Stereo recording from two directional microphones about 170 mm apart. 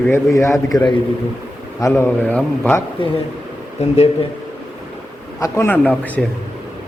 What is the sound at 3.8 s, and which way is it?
Speech, 40° left (ahead or behind).